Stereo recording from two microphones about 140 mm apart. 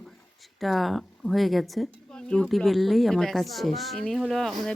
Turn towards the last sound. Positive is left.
turn(degrees=0)  # may be behind; listen again after turning